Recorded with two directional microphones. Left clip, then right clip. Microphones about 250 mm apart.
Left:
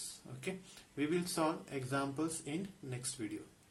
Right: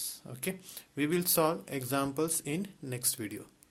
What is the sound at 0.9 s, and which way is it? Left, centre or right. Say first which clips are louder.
Speech: right 6 dB; right.